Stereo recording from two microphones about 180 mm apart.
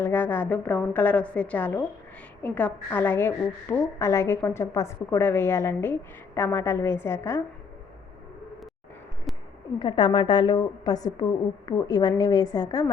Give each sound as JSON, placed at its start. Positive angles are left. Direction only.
{"t": 0.0, "sound": "a woman's voice", "side_deg": 10}
{"t": 9.3, "sound": "a sound", "side_deg": 0}
{"t": 9.7, "sound": "a woman's voice", "side_deg": 25}